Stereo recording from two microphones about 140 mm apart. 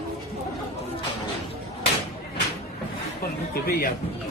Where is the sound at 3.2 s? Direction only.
90° left.